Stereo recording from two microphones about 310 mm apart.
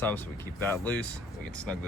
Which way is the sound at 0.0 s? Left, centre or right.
Centre.